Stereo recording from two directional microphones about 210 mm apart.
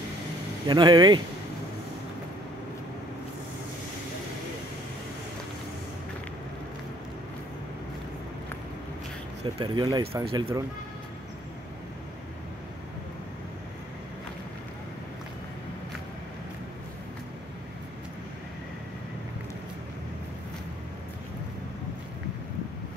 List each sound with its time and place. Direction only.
0.7 s speech: 20° right (ahead or behind)
9.6 s speech: 20° right (ahead or behind)